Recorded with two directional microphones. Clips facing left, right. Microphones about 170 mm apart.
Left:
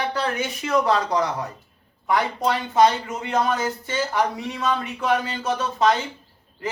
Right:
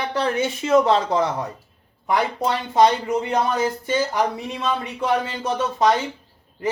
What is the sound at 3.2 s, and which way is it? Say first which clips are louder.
Speech: right 2 dB; 20° right (ahead or behind).